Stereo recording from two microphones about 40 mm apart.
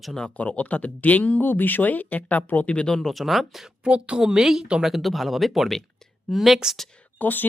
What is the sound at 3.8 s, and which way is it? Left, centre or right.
Speech, right.